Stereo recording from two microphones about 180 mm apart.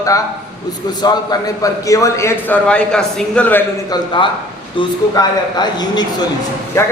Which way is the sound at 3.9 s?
25° left (ahead or behind).